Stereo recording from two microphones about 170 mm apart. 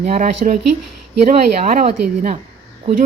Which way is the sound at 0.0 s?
45° right (ahead or behind).